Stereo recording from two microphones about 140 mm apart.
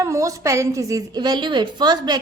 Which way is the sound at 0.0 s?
25° right (ahead or behind).